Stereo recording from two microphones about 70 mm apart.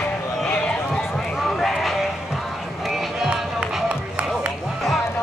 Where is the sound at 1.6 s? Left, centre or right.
Centre.